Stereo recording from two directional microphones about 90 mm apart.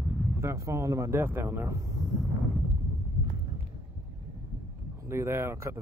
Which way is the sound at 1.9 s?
40° right (ahead or behind).